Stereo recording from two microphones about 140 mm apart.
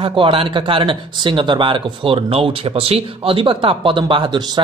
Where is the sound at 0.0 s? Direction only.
40° right (ahead or behind).